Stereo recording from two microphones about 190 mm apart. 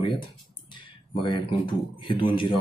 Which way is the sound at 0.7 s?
25° left (ahead or behind).